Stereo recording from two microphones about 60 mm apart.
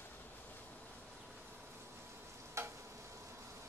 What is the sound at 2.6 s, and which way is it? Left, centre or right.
Stir, right.